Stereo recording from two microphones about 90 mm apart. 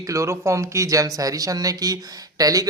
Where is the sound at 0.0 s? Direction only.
35° right (ahead or behind).